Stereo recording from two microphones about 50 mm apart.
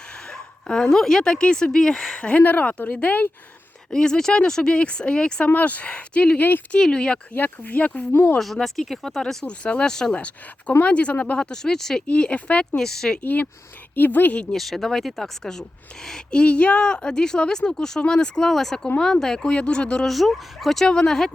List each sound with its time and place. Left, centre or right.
0.3 s a woman's voice: centre
2.4 s speech: left
3.9 s speech: centre
5.5 s speech: left
6.7 s speech: centre
7.3 s speech: left
8.1 s speech: left
8.5 s speech: centre
10.2 s speech: left
12.0 s speech: left
12.8 s speech: centre
13.2 s speech: left
14.4 s speech: centre
20.1 s speech: centre